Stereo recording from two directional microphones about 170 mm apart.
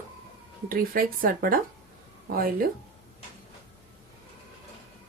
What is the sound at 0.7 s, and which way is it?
Speech, 60° right (ahead or behind).